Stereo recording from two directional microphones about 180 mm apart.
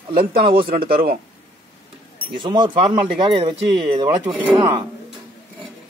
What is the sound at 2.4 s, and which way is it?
Speech, 25° right (ahead or behind).